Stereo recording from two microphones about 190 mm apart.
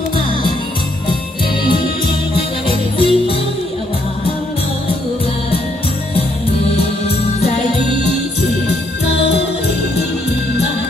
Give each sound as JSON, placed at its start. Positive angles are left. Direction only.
{"t": 3.0, "sound": "music", "side_deg": 30}